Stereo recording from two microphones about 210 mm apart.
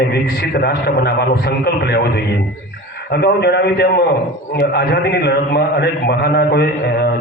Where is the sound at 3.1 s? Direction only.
50° left (ahead or behind).